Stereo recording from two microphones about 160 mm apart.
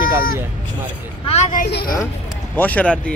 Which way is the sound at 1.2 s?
45° left (ahead or behind).